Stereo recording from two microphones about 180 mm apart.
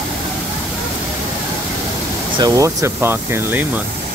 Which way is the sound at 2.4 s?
15° right (ahead or behind).